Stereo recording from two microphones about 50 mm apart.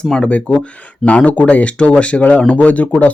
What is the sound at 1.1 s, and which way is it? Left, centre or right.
Speech, left.